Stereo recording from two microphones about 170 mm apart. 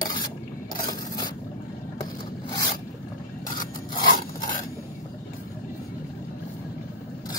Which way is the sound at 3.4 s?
55° left (ahead or behind).